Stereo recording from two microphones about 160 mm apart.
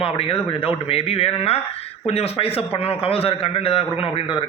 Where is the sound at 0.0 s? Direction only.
35° left (ahead or behind).